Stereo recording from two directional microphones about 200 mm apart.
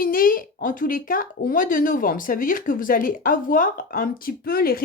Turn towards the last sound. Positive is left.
turn(degrees=50)  # may be behind; listen again after turning